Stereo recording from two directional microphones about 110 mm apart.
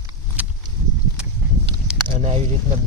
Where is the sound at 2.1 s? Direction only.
85° right.